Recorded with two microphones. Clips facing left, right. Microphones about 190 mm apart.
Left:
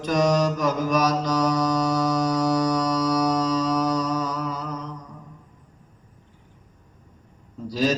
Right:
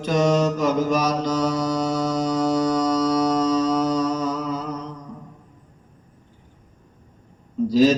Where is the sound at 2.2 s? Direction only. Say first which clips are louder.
Right 1 dB; 25° right (ahead or behind).